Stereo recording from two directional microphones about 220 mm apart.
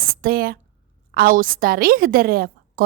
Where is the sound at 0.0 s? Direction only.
40° right (ahead or behind).